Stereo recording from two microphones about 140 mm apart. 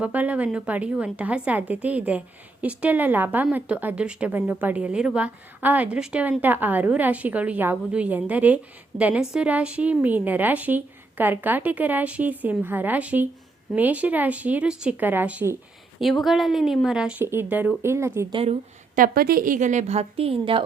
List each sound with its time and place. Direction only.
0.0 s a woman's voice: 10° right (ahead or behind)
16.0 s speech: centre (ahead or behind); by 18.3 s 20° right (ahead or behind)
18.3 s speech: 40° right (ahead or behind)
18.9 s a woman's voice: 90° right; by 20.7 s 40° right (ahead or behind)